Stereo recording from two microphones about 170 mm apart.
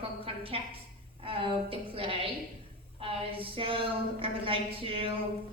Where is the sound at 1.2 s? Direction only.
30° right (ahead or behind).